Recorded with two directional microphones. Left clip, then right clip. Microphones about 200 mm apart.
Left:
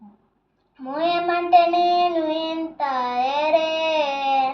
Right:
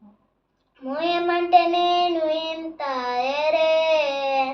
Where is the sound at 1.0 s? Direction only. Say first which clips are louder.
Left 1 dB; 15° right (ahead or behind).